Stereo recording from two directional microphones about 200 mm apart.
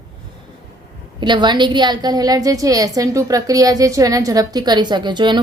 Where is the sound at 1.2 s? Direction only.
20° right (ahead or behind).